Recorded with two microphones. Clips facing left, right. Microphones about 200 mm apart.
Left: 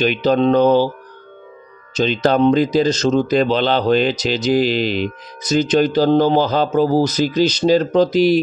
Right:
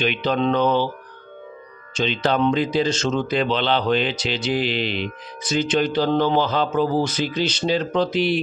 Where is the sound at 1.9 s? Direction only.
40° left (ahead or behind).